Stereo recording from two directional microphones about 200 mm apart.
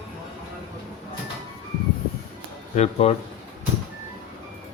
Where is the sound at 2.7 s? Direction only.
30° left (ahead or behind).